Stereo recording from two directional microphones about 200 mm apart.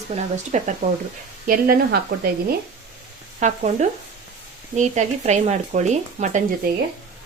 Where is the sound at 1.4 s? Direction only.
45° right (ahead or behind).